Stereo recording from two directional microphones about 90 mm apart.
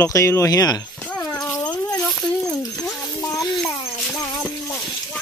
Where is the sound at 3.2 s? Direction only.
35° left (ahead or behind).